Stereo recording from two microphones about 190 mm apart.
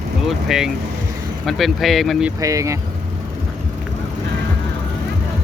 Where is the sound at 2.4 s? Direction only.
15° right (ahead or behind).